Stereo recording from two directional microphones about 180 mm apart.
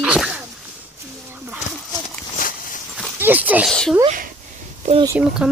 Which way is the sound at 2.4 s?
50° left (ahead or behind).